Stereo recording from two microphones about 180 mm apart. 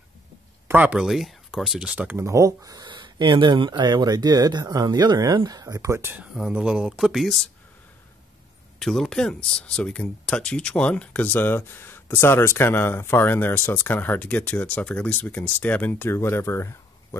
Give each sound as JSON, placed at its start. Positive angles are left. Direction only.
{"t": 0.7, "sound": "speech", "side_deg": -5}
{"t": 8.7, "sound": "speech", "side_deg": 0}